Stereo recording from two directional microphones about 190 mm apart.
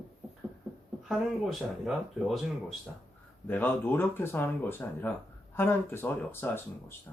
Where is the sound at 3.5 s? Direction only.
10° left (ahead or behind).